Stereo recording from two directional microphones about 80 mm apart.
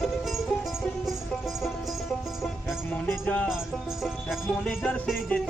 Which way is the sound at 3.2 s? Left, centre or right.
Centre.